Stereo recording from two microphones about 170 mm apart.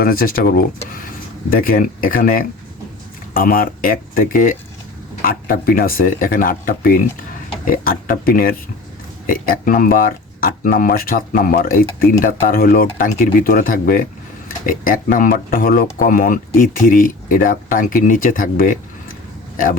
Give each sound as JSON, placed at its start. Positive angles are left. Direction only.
{"t": 0.0, "sound": "speech", "side_deg": 60}